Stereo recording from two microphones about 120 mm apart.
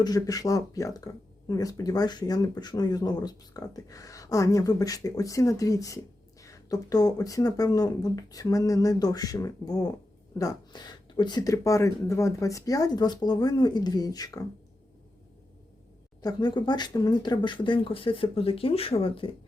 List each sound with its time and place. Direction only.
0.0 s speech: 30° left (ahead or behind)
11.5 s speech: 25° left (ahead or behind)
16.2 s speech: 40° left (ahead or behind)